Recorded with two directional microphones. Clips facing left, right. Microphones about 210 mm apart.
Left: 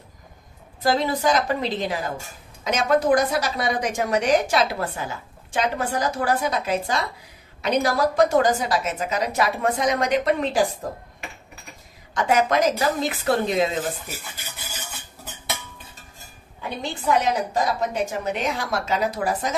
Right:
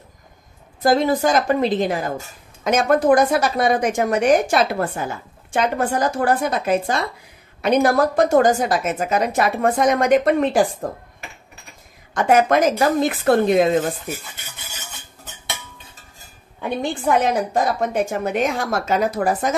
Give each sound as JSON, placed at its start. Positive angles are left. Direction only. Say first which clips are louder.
{"t": 0.8, "sound": "a woman's voice", "louder": "right 4 dB", "side_deg": -50}
{"t": 12.1, "sound": "a woman's voice", "louder": "right 5 dB", "side_deg": -50}
{"t": 16.6, "sound": "a woman's voice", "louder": "right 5 dB", "side_deg": -50}